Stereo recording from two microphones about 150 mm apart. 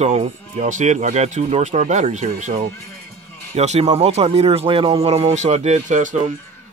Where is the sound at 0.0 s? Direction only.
45° right (ahead or behind).